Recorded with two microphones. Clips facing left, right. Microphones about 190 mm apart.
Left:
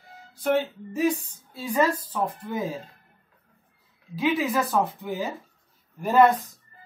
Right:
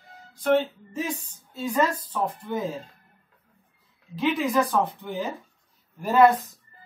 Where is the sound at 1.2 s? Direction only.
10° left (ahead or behind).